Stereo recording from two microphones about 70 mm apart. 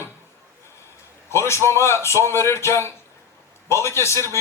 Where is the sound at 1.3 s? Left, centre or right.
Left.